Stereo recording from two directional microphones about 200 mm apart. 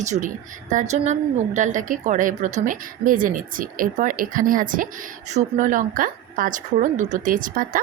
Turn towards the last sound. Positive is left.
turn(degrees=-45)  # may be behind; listen again after turning